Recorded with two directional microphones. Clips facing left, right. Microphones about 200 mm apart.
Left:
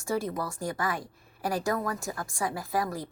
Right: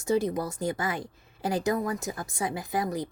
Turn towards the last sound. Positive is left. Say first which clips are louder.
# right 1 dB
turn(degrees=-20)  # may be behind; listen again after turning